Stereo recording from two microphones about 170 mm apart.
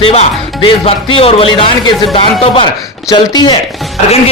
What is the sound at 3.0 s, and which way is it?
Speech, 25° left (ahead or behind).